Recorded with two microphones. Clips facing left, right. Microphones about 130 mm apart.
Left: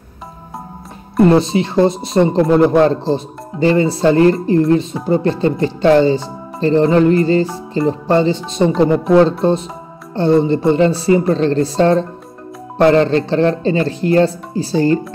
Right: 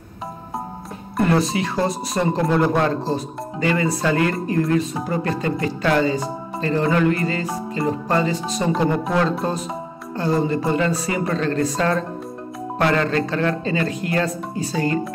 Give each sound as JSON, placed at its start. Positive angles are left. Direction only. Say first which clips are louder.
{"t": 1.2, "sound": "speech", "louder": "left 8 dB", "side_deg": 25}